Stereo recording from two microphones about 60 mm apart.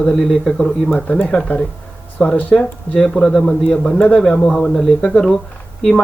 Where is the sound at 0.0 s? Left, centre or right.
Centre.